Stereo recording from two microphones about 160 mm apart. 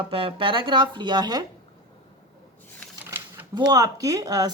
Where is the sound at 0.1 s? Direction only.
35° right (ahead or behind).